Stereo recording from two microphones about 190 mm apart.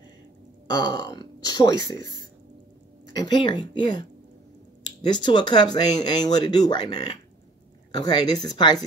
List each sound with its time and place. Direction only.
0.7 s speech: 20° left (ahead or behind)